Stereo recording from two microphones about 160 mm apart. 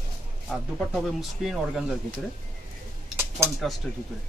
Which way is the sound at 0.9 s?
Centre (ahead or behind).